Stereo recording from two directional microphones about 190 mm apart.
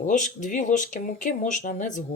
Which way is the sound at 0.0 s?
40° left (ahead or behind).